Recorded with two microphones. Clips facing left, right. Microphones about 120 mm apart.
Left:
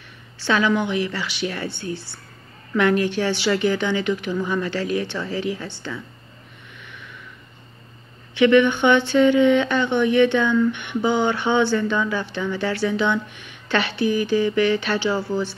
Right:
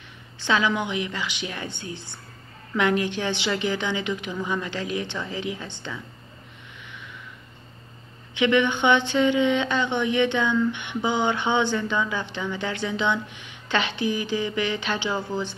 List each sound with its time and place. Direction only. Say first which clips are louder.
0.4 s a woman's voice: left 3 dB; 20° right (ahead or behind)
8.4 s speech: left 6 dB; 20° right (ahead or behind)